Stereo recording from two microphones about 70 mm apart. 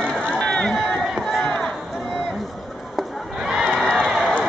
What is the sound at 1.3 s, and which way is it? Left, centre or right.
Crowd, centre.